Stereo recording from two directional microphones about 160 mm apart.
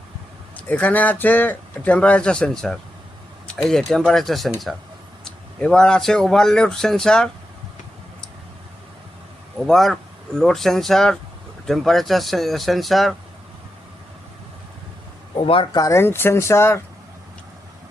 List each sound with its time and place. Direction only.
0.5 s speech: 10° left (ahead or behind)
9.6 s speech: centre (ahead or behind)
15.4 s speech: 30° left (ahead or behind); by 16.8 s 15° left (ahead or behind)